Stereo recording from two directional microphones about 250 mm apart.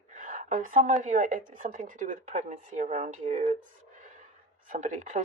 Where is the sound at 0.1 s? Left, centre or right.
Right.